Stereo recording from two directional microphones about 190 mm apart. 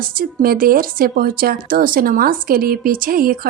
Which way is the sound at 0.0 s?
50° right (ahead or behind).